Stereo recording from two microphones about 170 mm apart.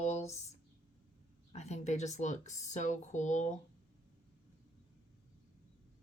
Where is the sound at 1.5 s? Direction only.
40° left (ahead or behind).